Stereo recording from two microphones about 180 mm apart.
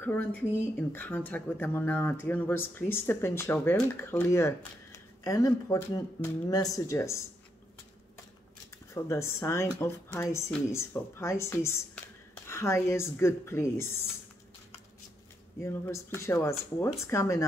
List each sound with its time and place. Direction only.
0.0 s speech: 10° left (ahead or behind)
8.9 s speech: 15° left (ahead or behind)
15.6 s speech: 15° left (ahead or behind)